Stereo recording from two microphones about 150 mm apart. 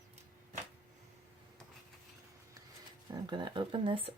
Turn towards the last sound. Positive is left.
turn(degrees=-35)  # may be behind; listen again after turning